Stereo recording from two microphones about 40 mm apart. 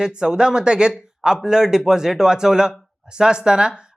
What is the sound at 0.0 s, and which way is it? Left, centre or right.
Speech, centre.